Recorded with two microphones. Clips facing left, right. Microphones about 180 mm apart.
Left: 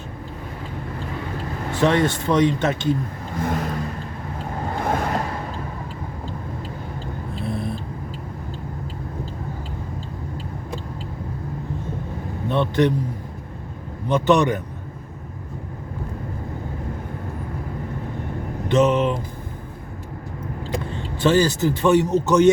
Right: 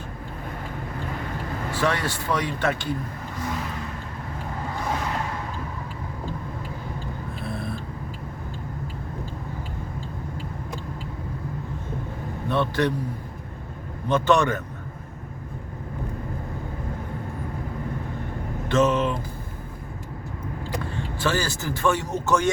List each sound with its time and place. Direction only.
1.8 s speech: 25° left (ahead or behind)
3.3 s vehicle: 50° left (ahead or behind)
4.8 s vehicle: 50° left (ahead or behind)
12.5 s a man's voice: 20° left (ahead or behind)
14.1 s a man's voice: 15° left (ahead or behind)
18.7 s speech: 20° left (ahead or behind)
20.9 s a man's voice: 20° left (ahead or behind)